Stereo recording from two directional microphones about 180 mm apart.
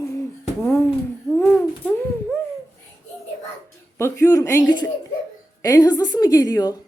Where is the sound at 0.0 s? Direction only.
15° left (ahead or behind).